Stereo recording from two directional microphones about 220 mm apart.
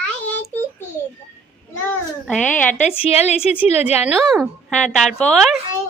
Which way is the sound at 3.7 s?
30° left (ahead or behind).